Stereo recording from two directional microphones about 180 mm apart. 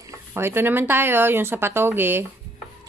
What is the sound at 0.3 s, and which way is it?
A woman's voice, 10° right (ahead or behind).